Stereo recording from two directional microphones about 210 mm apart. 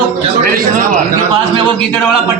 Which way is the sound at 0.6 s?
40° right (ahead or behind).